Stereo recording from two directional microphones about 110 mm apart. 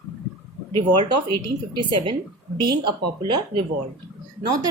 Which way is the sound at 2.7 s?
45° right (ahead or behind).